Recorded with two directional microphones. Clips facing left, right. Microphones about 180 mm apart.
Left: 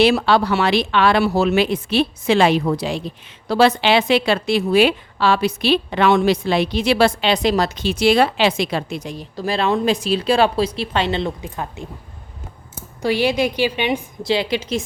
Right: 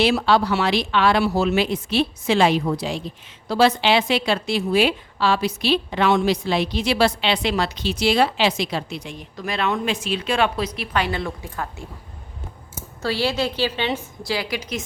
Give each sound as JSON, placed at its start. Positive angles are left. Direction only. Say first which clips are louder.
{"t": 0.0, "sound": "a woman's voice", "louder": "left 3 dB", "side_deg": 65}
{"t": 13.0, "sound": "a woman's voice", "louder": "left 5 dB", "side_deg": 15}